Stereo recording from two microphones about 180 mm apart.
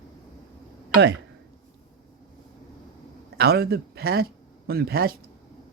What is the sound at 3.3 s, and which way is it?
A man's voice, 60° right (ahead or behind).